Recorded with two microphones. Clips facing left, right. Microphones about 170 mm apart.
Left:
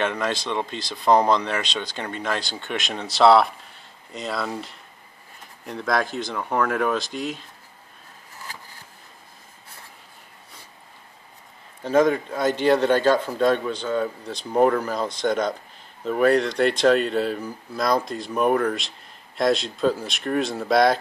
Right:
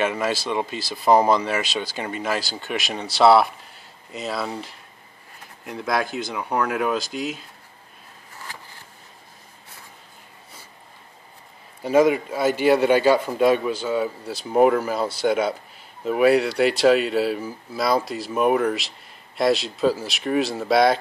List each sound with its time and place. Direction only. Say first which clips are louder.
0.0 s a man's voice: right 2 dB; 5° right (ahead or behind)
11.8 s a man's voice: right 2 dB; 10° right (ahead or behind)